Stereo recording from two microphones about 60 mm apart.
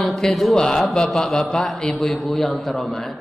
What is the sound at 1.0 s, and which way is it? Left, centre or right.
A man's voice, centre.